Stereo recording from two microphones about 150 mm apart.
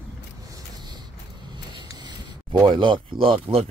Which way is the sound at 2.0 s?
25° right (ahead or behind).